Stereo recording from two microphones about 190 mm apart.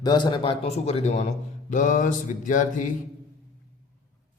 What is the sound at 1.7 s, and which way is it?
Mantra, 40° left (ahead or behind).